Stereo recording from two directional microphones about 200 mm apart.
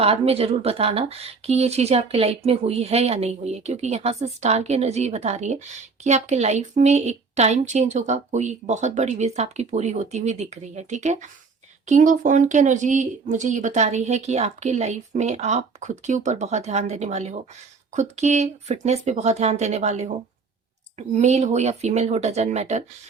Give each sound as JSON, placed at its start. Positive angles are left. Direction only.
{"t": 0.0, "sound": "speech", "side_deg": -30}
{"t": 21.2, "sound": "speech", "side_deg": -35}